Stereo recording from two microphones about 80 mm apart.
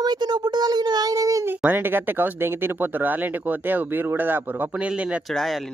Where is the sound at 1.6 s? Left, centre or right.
Right.